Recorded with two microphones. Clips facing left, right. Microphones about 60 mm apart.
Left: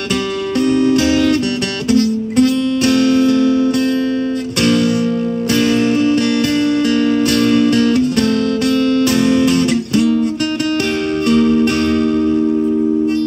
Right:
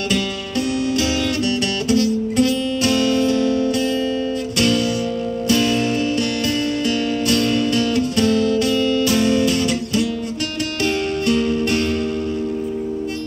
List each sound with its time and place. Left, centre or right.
0.7 s music: left
1.9 s guitar: left
4.6 s music: left
11.2 s music: left